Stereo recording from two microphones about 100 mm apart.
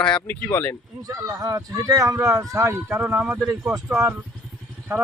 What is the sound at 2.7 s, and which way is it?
Speech, 10° right (ahead or behind).